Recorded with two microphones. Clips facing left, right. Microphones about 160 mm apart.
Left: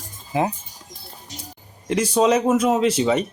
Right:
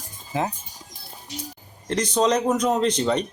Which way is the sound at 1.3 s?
45° left (ahead or behind).